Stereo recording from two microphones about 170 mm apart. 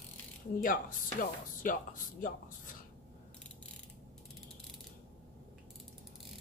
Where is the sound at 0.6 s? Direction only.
55° left (ahead or behind).